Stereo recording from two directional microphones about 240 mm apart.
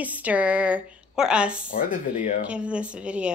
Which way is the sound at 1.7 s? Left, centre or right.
Left.